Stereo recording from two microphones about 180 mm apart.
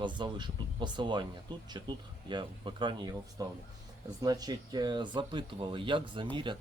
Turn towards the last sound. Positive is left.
turn(degrees=-25)  # may be behind; listen again after turning